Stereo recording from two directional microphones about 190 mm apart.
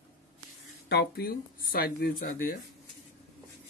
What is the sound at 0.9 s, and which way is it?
Speech, 55° left (ahead or behind).